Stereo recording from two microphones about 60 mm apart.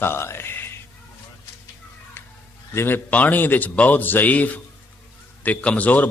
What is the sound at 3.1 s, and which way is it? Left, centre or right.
A man's voice, left.